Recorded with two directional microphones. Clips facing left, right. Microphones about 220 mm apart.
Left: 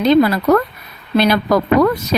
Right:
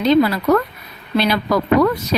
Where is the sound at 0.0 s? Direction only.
50° left (ahead or behind).